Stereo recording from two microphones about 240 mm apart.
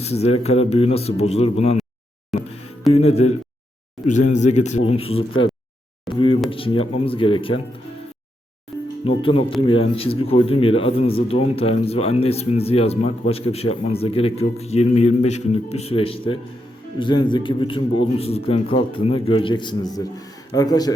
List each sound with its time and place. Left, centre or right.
0.0 s speech: left
2.3 s music: centre
2.9 s speech: left
9.6 s speech: left